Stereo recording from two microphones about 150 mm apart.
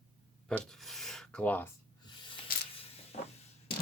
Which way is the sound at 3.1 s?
45° left (ahead or behind).